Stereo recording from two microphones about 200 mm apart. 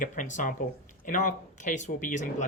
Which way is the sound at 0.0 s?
40° left (ahead or behind).